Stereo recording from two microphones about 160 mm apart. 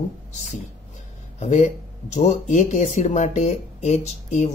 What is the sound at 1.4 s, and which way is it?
Speech, 45° left (ahead or behind).